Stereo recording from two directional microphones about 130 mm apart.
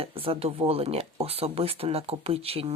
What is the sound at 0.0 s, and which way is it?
Speech, 45° right (ahead or behind).